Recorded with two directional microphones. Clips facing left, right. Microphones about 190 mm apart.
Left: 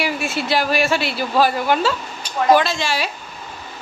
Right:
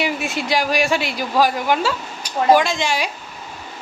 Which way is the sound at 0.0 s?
15° right (ahead or behind).